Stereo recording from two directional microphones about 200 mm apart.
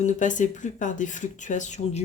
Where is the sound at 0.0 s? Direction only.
40° left (ahead or behind).